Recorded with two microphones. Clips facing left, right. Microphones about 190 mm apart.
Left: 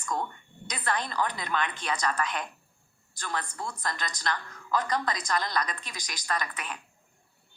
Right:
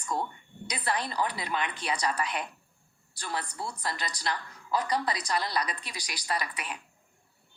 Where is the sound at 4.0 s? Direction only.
30° right (ahead or behind).